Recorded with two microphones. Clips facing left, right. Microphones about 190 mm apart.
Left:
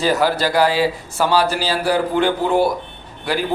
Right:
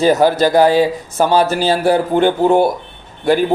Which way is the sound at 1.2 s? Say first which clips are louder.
Right 4 dB; 45° right (ahead or behind).